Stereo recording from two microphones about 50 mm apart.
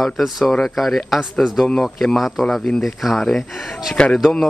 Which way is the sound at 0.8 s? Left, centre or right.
Centre.